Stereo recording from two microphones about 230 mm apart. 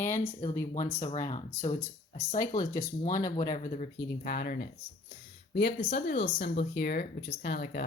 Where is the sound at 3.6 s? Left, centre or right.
Left.